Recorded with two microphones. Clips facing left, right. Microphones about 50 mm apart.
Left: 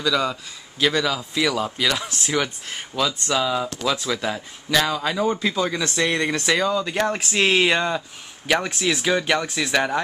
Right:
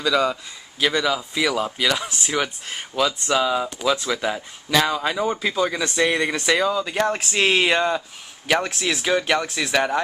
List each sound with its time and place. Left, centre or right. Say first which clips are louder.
0.0 s a man's voice: right 2 dB; centre